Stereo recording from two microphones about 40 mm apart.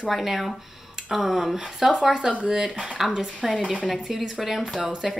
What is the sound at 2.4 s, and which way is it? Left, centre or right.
Speech, right.